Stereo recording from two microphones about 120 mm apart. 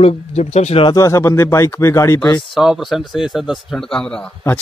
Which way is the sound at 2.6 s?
5° right (ahead or behind).